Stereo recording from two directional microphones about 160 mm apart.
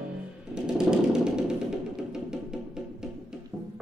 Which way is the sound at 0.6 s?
5° right (ahead or behind).